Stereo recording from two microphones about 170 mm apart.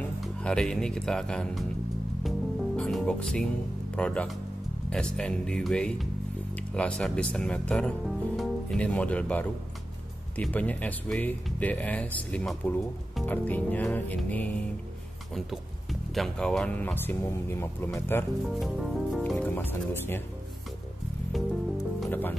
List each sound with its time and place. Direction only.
0.0 s speech: 5° left (ahead or behind)
2.2 s music: 5° left (ahead or behind)
3.9 s speech: 5° left (ahead or behind)
18.5 s speech: centre (ahead or behind)
19.3 s speech: 10° left (ahead or behind)
21.7 s music: 10° left (ahead or behind)